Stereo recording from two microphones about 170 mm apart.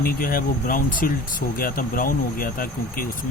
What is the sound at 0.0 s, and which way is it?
Speech, 55° left (ahead or behind).